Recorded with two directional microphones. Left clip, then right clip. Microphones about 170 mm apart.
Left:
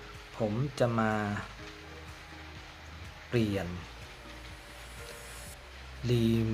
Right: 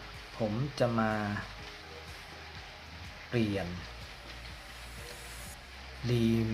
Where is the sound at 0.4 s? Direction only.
10° left (ahead or behind).